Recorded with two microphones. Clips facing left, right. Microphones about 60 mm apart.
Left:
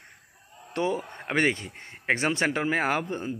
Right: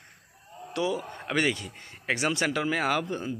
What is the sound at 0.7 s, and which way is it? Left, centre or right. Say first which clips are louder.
Speech: left 1 dB; left.